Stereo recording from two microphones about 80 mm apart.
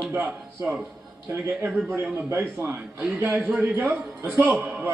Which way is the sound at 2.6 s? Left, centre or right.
Right.